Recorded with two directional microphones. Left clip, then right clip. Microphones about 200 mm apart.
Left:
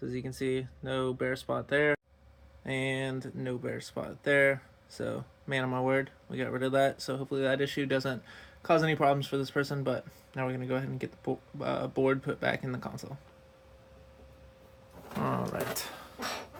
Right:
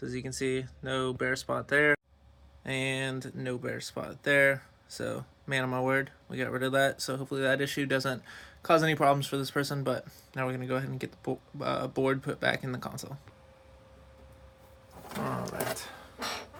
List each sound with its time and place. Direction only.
0.0 s speech: 5° left (ahead or behind)
15.8 s dog: 45° left (ahead or behind)